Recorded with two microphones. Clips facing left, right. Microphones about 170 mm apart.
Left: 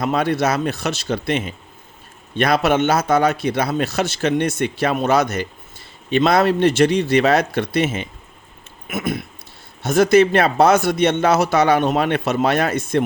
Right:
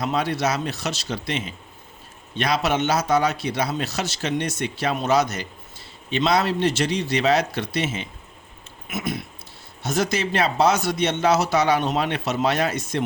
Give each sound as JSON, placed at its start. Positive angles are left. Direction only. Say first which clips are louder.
{"t": 0.0, "sound": "speech", "louder": "left 4 dB", "side_deg": 55}